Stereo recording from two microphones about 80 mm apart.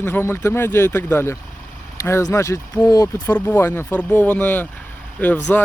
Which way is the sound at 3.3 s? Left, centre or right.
Left.